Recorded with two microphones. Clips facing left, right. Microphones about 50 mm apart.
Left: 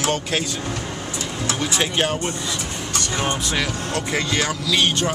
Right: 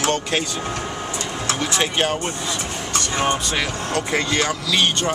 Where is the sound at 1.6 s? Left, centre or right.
Centre.